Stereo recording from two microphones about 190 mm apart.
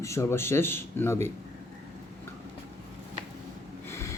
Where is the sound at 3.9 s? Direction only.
15° left (ahead or behind).